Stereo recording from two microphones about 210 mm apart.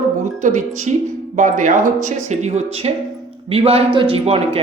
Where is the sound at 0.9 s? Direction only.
35° right (ahead or behind).